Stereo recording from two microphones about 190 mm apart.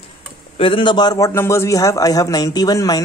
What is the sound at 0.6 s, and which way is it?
A man's voice, 25° left (ahead or behind).